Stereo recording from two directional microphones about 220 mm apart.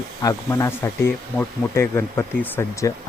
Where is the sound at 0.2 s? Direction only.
15° left (ahead or behind).